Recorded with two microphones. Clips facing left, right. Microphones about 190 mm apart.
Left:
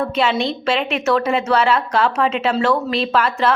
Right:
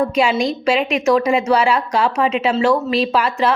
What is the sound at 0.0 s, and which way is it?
A woman's voice, 10° right (ahead or behind).